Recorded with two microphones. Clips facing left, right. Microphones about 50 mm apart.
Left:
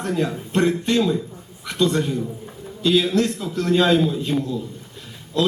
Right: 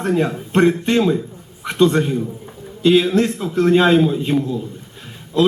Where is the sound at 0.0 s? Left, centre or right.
Right.